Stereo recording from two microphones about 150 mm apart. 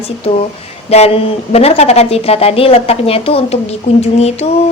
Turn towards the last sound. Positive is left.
turn(degrees=45)  # may be behind; listen again after turning